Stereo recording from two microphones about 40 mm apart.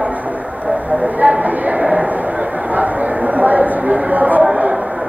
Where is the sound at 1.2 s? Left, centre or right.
Right.